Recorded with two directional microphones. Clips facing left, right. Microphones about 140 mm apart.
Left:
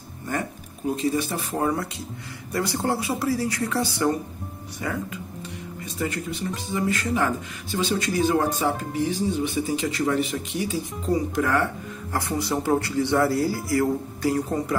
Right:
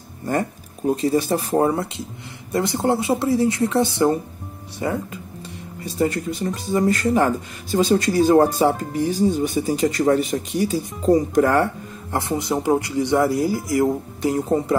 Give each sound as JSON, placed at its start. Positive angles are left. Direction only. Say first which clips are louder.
{"t": 1.0, "sound": "speech", "louder": "right 5 dB", "side_deg": -35}
{"t": 12.1, "sound": "speech", "louder": "right 3 dB", "side_deg": -25}